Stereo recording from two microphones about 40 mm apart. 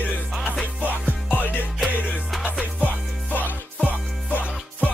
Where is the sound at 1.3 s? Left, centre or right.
Left.